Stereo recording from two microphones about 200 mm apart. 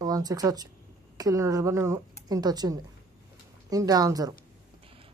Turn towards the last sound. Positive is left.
turn(degrees=-20)  # may be behind; listen again after turning